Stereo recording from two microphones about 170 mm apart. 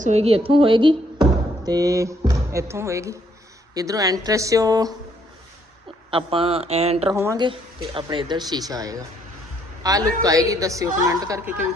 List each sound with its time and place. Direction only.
0.0 s a woman's voice: 40° right (ahead or behind); by 4.9 s 20° right (ahead or behind)
6.1 s speech: 30° right (ahead or behind)
7.2 s speech: 15° right (ahead or behind)
8.1 s a woman's voice: 30° right (ahead or behind)